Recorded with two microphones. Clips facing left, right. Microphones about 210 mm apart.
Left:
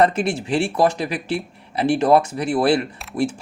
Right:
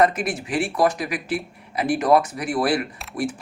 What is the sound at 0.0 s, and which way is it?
Speech, 30° left (ahead or behind).